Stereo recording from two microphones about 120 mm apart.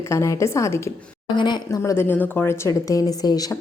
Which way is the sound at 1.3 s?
40° left (ahead or behind).